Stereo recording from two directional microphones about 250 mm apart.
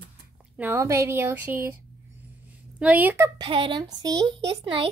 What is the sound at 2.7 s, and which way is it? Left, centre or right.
Speech, centre.